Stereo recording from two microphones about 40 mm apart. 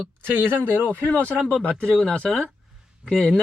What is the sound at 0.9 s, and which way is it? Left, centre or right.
Speech, left.